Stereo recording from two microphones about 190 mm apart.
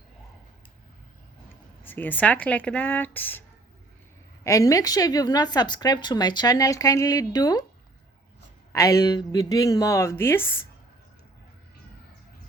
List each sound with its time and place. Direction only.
1.8 s speech: 10° left (ahead or behind)
4.4 s speech: 15° left (ahead or behind)
9.0 s speech: 20° left (ahead or behind)